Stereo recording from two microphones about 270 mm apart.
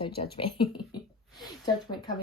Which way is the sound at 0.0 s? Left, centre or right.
Centre.